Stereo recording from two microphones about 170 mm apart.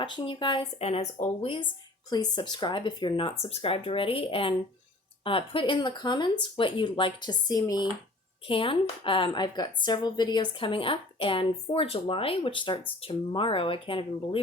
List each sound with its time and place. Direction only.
0.0 s a woman's voice: 25° left (ahead or behind)